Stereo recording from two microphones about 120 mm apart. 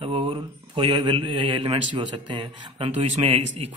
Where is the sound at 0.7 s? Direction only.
40° right (ahead or behind).